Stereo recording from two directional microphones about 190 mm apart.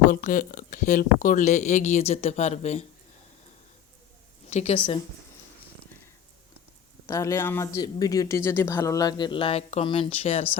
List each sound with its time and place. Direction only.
0.1 s speech: 45° left (ahead or behind)
4.4 s a woman's voice: 35° left (ahead or behind)
7.1 s speech: 15° left (ahead or behind); by 10.4 s 35° left (ahead or behind)